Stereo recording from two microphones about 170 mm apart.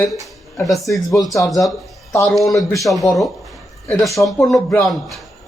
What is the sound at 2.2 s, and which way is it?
Speech, centre (ahead or behind).